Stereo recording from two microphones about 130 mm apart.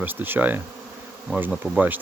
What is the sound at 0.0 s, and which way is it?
Speech, 15° right (ahead or behind).